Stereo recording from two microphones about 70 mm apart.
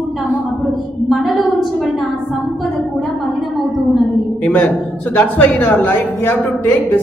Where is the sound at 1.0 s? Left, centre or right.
Centre.